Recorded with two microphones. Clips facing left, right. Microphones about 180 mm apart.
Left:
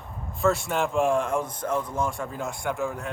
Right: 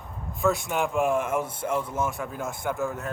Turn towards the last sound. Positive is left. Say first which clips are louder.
# even
turn(degrees=0)  # may be behind; listen again after turning